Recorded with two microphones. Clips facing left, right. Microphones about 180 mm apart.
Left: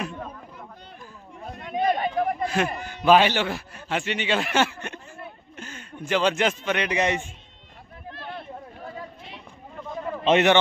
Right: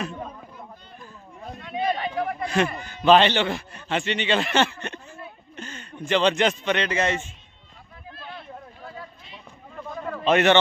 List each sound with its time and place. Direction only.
1.6 s a sound: 45° left (ahead or behind)
2.4 s a man's voice: 5° left (ahead or behind)
10.2 s a man's voice: 15° left (ahead or behind)